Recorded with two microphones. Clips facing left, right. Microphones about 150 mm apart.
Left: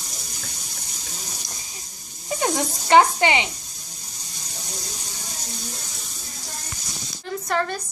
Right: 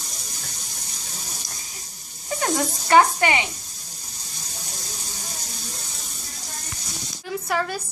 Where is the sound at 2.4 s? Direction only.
20° left (ahead or behind).